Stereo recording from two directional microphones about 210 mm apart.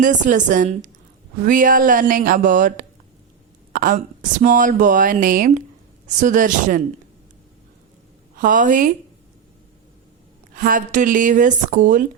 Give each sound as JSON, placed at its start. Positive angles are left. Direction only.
{"t": 0.0, "sound": "speech", "side_deg": -35}
{"t": 8.4, "sound": "speech", "side_deg": -40}
{"t": 10.5, "sound": "speech", "side_deg": -40}